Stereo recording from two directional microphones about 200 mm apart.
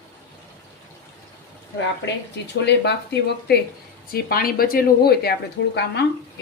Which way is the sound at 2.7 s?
55° left (ahead or behind).